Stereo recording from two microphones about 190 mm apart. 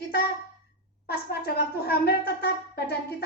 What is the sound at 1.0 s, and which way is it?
Speech, 55° left (ahead or behind).